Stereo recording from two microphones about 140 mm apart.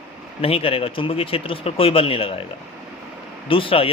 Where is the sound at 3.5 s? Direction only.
40° left (ahead or behind).